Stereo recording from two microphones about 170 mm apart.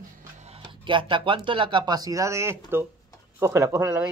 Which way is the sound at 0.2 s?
40° right (ahead or behind).